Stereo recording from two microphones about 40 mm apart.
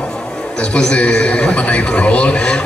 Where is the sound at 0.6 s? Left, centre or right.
Left.